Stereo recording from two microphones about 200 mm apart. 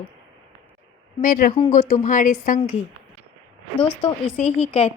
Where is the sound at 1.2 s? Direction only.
40° left (ahead or behind).